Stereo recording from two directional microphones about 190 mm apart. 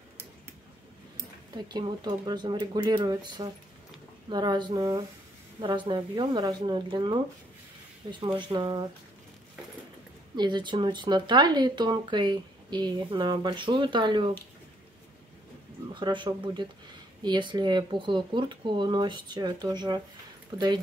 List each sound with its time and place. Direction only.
1.7 s speech: 25° right (ahead or behind)
10.3 s speech: 25° right (ahead or behind)
15.9 s speech: 25° right (ahead or behind)